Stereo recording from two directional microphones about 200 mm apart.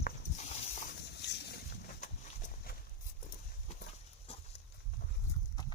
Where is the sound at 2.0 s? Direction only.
40° left (ahead or behind).